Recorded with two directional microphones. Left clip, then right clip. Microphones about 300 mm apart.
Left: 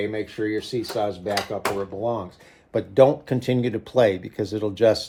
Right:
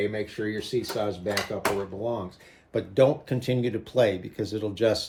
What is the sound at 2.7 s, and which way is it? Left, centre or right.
Speech, left.